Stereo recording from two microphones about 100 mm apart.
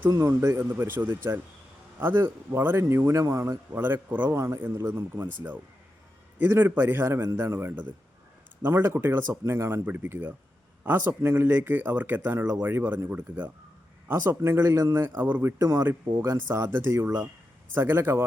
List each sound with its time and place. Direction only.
0.1 s speech: 30° right (ahead or behind)
6.4 s speech: 20° right (ahead or behind)